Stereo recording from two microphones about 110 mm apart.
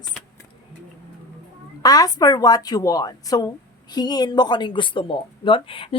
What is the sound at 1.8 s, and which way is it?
Speech, 35° left (ahead or behind).